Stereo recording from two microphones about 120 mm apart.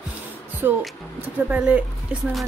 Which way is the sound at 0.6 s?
15° right (ahead or behind).